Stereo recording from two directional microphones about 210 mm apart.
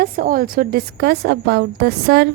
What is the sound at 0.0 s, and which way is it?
A woman's voice, 45° right (ahead or behind).